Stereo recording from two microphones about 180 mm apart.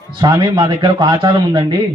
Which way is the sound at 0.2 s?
25° right (ahead or behind).